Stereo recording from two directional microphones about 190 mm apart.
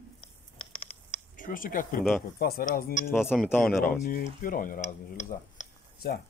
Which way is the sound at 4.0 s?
45° left (ahead or behind).